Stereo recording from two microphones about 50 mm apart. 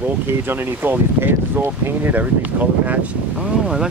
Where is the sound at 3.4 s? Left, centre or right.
Centre.